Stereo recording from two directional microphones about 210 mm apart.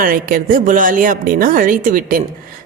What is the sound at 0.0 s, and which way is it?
Speech, 40° right (ahead or behind).